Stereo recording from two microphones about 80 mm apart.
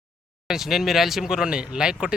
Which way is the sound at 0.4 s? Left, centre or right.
Centre.